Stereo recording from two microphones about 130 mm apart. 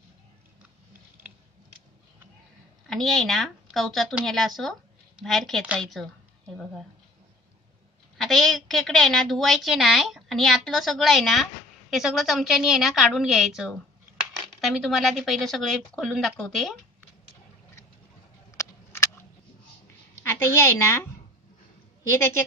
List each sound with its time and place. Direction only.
2.9 s a woman's voice: centre (ahead or behind)
8.2 s a woman's voice: centre (ahead or behind)
18.6 s a sound: 20° left (ahead or behind)
20.2 s a woman's voice: 20° left (ahead or behind)